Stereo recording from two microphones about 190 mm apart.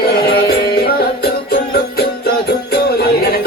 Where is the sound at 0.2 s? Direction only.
55° left (ahead or behind).